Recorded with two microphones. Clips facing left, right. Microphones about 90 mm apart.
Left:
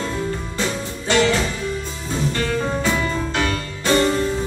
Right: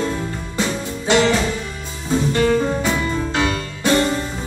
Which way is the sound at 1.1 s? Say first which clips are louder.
Right 2 dB; 20° right (ahead or behind).